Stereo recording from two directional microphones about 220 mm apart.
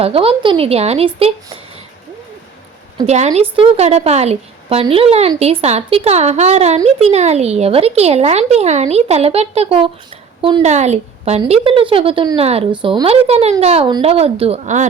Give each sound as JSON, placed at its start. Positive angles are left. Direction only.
{"t": 0.0, "sound": "a woman's voice", "side_deg": -25}
{"t": 3.1, "sound": "a woman's voice", "side_deg": -30}